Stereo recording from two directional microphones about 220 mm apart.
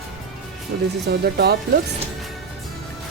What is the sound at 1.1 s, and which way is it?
Speech, 45° right (ahead or behind).